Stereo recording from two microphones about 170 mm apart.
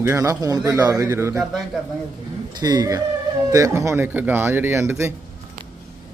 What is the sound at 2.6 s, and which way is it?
Speech, 25° right (ahead or behind).